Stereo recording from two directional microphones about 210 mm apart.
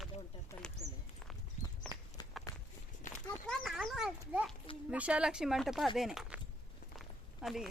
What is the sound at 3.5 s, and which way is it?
Speech, centre (ahead or behind).